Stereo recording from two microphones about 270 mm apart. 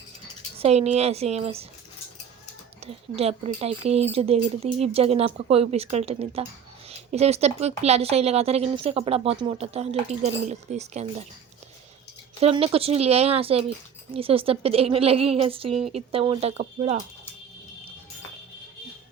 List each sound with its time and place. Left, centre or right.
0.6 s speech: right
2.8 s speech: right
12.4 s speech: right